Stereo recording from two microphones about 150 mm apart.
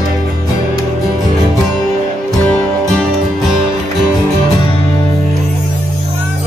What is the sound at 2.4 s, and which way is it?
Music, 5° left (ahead or behind).